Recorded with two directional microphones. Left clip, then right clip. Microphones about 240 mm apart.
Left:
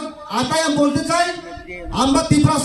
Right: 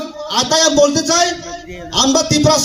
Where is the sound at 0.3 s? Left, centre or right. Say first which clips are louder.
Right 5 dB; right.